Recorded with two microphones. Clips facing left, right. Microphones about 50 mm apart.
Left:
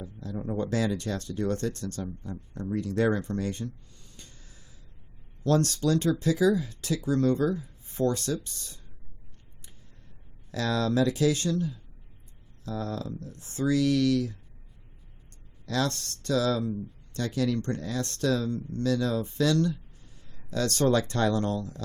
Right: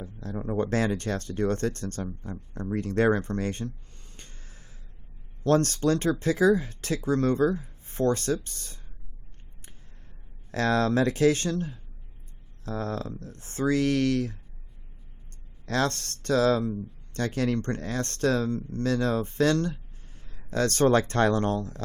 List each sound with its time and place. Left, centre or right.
0.0 s a sound: right
0.5 s speech: right
2.7 s a sound: right
5.4 s speech: right
10.5 s speech: right
15.6 s speech: right